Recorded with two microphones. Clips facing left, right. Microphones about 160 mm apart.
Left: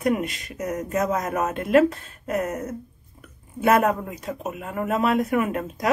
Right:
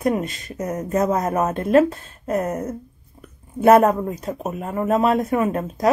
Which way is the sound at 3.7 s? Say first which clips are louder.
Right 6 dB; 35° right (ahead or behind).